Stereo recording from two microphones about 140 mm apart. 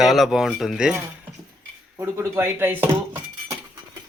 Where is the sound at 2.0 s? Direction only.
15° right (ahead or behind).